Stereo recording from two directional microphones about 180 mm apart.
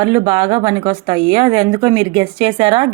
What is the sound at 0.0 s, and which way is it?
Speech, 25° right (ahead or behind).